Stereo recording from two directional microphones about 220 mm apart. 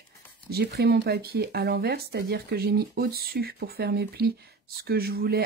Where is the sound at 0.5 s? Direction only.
50° right (ahead or behind).